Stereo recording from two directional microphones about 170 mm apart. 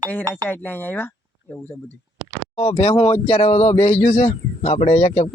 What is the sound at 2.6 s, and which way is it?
Speech, 35° left (ahead or behind).